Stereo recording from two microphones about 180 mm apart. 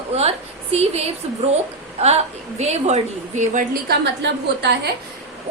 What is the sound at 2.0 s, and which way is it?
A woman's voice, 35° right (ahead or behind).